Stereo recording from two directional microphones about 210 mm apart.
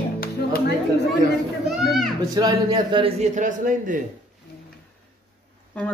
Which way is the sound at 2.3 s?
20° right (ahead or behind).